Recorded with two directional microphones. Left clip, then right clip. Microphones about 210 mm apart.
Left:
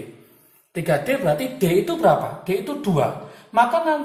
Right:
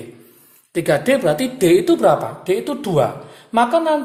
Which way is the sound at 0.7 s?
50° right (ahead or behind).